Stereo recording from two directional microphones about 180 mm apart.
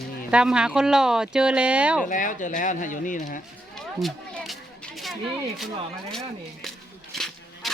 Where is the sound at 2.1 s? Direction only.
45° left (ahead or behind).